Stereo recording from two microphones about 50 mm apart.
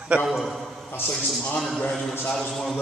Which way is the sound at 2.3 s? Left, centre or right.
Centre.